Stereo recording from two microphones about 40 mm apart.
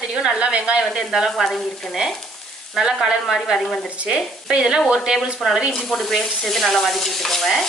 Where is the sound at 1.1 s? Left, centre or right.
Centre.